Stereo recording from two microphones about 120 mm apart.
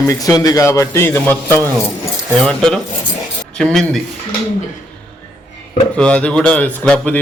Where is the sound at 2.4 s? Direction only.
5° left (ahead or behind).